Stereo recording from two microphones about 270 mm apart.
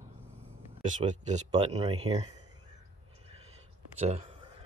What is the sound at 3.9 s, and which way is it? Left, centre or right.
Speech, right.